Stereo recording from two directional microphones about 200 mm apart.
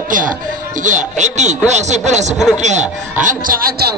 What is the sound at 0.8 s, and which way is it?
A man's voice, 40° right (ahead or behind).